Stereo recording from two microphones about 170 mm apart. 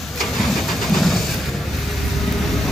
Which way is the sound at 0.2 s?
Centre (ahead or behind).